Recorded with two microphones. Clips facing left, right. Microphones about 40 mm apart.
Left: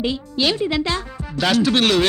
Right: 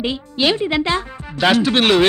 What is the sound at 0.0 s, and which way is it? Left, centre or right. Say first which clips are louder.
Music: right 2 dB; right.